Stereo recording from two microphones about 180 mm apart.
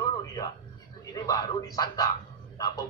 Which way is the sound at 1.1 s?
20° left (ahead or behind).